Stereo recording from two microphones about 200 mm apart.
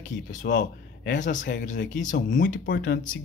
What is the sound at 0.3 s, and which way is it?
Speech, 40° left (ahead or behind).